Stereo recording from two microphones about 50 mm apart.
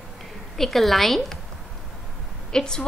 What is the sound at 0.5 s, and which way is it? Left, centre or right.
Speech, centre.